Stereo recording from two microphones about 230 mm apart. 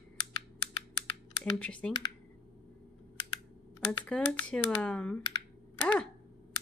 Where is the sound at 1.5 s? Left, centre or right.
Centre.